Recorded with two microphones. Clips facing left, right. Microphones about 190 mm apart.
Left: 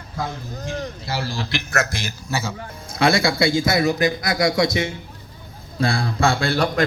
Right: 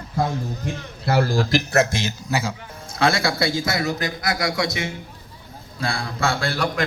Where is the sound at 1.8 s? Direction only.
20° right (ahead or behind).